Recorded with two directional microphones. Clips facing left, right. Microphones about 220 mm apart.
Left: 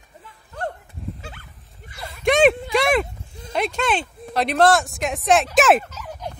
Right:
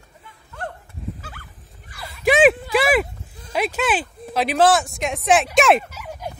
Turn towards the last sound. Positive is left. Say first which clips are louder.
# even
turn(degrees=-10)  # may be behind; listen again after turning